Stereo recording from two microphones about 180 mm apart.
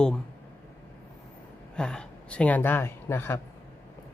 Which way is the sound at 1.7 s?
5° left (ahead or behind).